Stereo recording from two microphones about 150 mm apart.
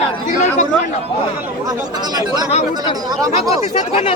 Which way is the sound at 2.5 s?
45° left (ahead or behind).